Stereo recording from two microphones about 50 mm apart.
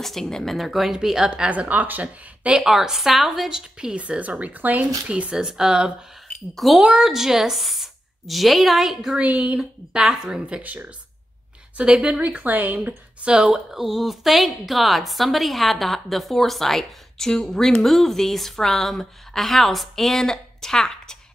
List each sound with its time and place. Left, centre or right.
0.0 s speech: centre
1.5 s a woman's voice: right
2.4 s a woman's voice: centre
3.4 s a woman's voice: centre
3.9 s speech: right
5.0 s a woman's voice: right
6.5 s speech: centre
9.2 s speech: right
9.6 s a woman's voice: centre
10.6 s a woman's voice: right
11.8 s speech: centre
12.2 s a woman's voice: right
13.2 s speech: centre